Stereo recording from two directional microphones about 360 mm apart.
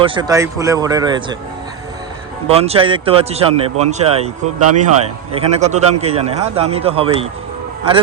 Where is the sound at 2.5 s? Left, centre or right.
Centre.